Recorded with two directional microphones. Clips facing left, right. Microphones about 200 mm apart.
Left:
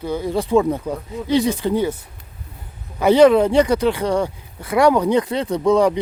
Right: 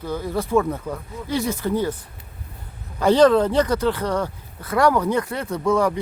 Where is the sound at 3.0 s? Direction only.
10° left (ahead or behind).